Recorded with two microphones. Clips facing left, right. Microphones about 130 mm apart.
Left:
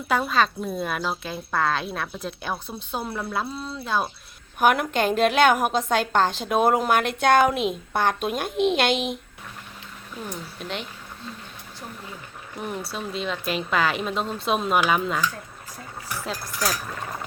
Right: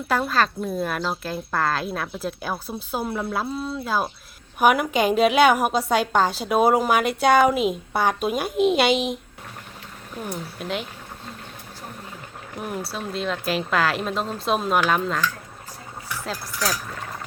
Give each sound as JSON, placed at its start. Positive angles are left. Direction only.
{"t": 0.1, "sound": "a woman's voice", "side_deg": 0}
{"t": 10.2, "sound": "a woman's voice", "side_deg": -5}
{"t": 12.5, "sound": "a woman's voice", "side_deg": -5}